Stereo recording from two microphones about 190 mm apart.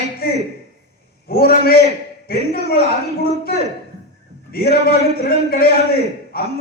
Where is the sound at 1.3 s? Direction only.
55° left (ahead or behind).